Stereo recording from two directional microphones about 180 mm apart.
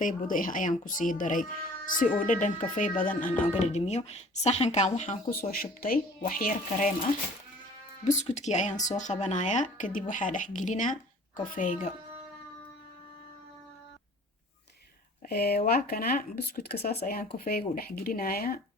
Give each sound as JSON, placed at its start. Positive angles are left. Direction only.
{"t": 0.0, "sound": "speech", "side_deg": 45}
{"t": 3.4, "sound": "speech", "side_deg": 35}
{"t": 8.0, "sound": "speech", "side_deg": 40}
{"t": 15.3, "sound": "speech", "side_deg": 60}